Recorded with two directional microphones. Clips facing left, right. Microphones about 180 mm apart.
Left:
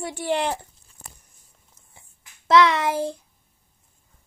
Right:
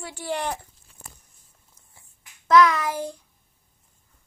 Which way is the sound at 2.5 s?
25° left (ahead or behind).